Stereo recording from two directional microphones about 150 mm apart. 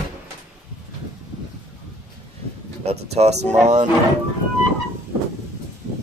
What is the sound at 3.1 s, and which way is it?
Speech, 45° right (ahead or behind).